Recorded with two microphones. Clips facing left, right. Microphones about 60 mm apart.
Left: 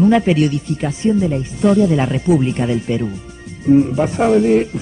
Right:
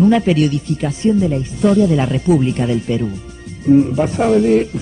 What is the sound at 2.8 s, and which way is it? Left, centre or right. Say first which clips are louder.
Speech: right 1 dB; centre.